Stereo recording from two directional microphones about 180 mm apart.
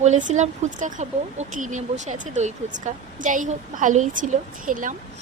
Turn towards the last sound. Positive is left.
turn(degrees=-45)  # may be behind; listen again after turning